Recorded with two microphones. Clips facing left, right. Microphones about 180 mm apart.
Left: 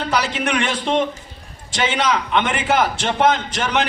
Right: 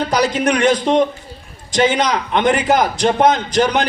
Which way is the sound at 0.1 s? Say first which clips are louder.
Right 3 dB; 40° right (ahead or behind).